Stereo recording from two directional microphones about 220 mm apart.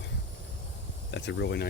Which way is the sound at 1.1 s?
55° left (ahead or behind).